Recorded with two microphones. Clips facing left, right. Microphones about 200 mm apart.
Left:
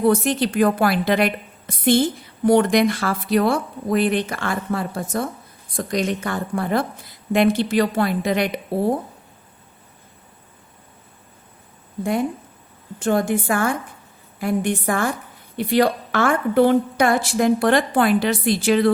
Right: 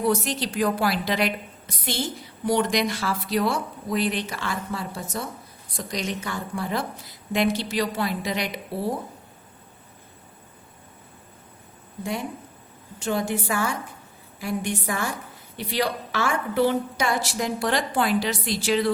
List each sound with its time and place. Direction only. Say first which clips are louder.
0.0 s a woman's voice: left 6 dB; 55° left (ahead or behind)
13.0 s a woman's voice: left 6 dB; 50° left (ahead or behind)